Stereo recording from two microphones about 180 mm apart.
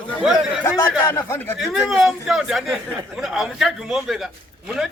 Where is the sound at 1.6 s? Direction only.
Centre (ahead or behind).